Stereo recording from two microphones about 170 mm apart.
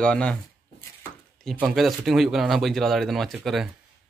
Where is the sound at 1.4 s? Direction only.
Centre (ahead or behind).